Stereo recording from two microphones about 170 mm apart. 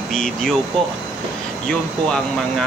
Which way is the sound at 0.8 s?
Centre (ahead or behind).